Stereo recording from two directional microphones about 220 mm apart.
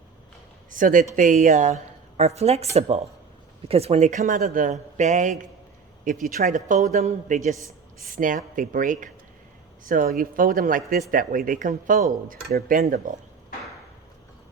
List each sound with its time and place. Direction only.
0.7 s a woman's voice: 35° right (ahead or behind)